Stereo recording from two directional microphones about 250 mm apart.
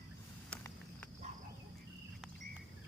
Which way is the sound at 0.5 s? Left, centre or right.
Centre.